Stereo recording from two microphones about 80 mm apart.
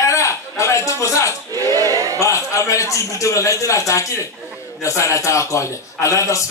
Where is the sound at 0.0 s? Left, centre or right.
Left.